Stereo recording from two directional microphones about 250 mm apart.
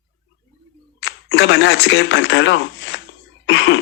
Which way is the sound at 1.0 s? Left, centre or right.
Left.